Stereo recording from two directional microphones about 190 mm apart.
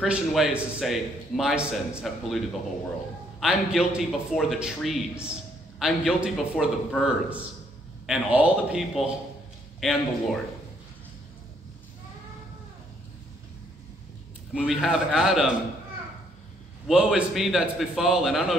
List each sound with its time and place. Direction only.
0.0 s a man's voice: centre (ahead or behind)
14.5 s a man's voice: 5° right (ahead or behind)
16.8 s a man's voice: 5° right (ahead or behind)